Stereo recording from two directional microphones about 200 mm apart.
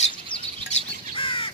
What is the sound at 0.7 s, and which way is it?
Bird, 25° left (ahead or behind).